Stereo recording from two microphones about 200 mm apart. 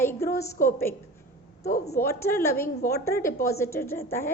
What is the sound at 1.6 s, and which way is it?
Speech, 50° left (ahead or behind).